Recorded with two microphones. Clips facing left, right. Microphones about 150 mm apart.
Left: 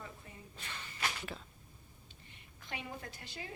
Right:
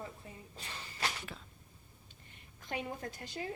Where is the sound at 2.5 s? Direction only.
40° right (ahead or behind).